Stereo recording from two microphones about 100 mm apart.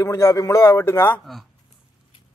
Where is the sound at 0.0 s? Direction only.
35° left (ahead or behind).